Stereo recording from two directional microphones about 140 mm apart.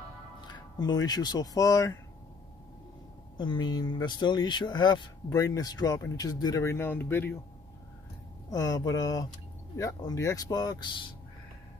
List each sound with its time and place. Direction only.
0.5 s speech: 30° left (ahead or behind)
3.3 s speech: 35° left (ahead or behind); by 7.3 s 15° left (ahead or behind)
8.5 s speech: 25° left (ahead or behind)